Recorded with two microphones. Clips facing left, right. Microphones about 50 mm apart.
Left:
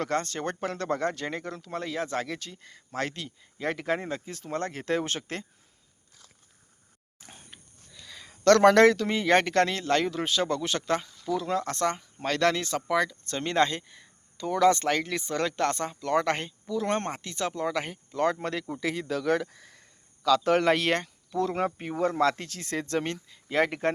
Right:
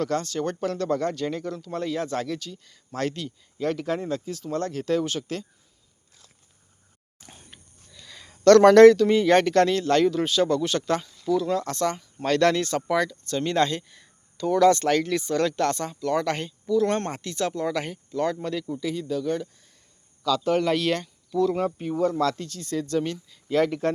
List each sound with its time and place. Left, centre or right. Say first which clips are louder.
0.0 s speech: right 3 dB; left
1.7 s speech: right 3 dB; centre
2.4 s speech: right 3 dB; left
2.9 s speech: right 4 dB; centre; by 5.5 s left
7.2 s speech: right 1 dB; centre; by 12.0 s left
12.2 s speech: right 5 dB; centre
13.2 s speech: right 2 dB; left
18.2 s speech: right 1 dB; left
18.7 s speech: right 1 dB; left
20.2 s speech: left 1 dB; left
22.4 s speech: right 3 dB; left
22.8 s speech: right 3 dB; left
23.3 s speech: right 3 dB; left